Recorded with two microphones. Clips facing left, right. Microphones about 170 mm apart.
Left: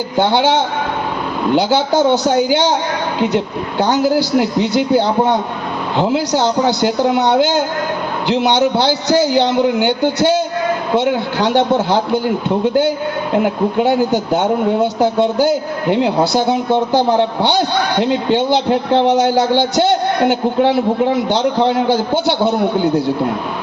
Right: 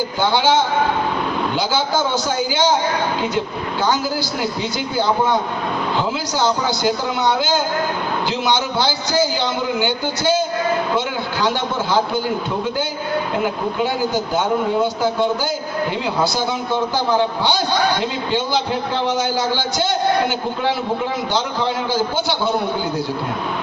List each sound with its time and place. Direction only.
0.2 s a man's voice: 65° left (ahead or behind)
6.1 s a man's voice: 65° left (ahead or behind)
13.8 s a man's voice: 65° left (ahead or behind)